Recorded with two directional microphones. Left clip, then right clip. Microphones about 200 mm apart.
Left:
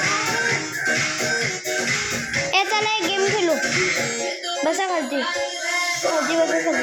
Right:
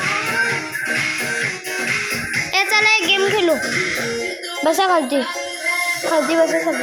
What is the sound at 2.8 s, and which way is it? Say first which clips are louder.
Child singing: right 6 dB; 5° right (ahead or behind).